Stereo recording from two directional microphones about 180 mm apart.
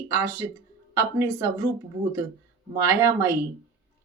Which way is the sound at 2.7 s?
15° right (ahead or behind).